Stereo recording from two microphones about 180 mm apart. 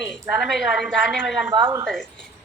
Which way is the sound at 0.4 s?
Centre (ahead or behind).